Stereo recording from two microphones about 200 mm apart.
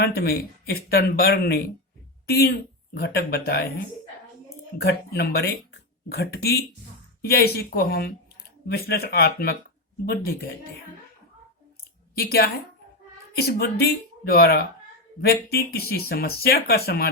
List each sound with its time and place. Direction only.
0.2 s speech: 50° left (ahead or behind)
4.8 s speech: 50° left (ahead or behind)
12.1 s speech: 50° left (ahead or behind)